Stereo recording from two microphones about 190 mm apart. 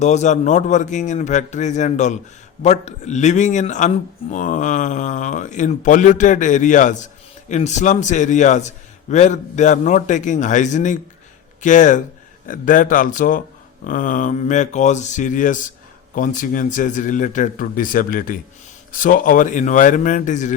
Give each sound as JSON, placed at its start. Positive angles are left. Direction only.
{"t": 0.0, "sound": "speech", "side_deg": 40}